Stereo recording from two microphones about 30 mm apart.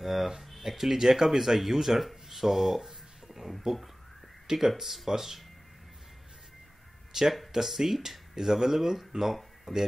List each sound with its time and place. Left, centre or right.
0.0 s speech: centre
3.7 s speech: right
4.5 s speech: centre
7.1 s a sound: centre
7.5 s speech: centre